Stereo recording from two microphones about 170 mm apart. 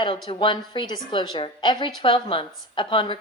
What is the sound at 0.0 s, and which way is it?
A woman's voice, 30° left (ahead or behind).